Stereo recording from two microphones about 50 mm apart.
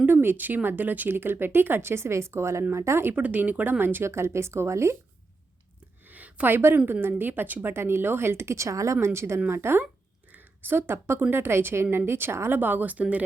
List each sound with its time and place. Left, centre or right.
0.0 s speech: right
3.2 s speech: right
4.0 s speech: right
6.1 s a sound: right
6.5 s speech: right
7.7 s speech: right
9.5 s speech: right
12.5 s speech: right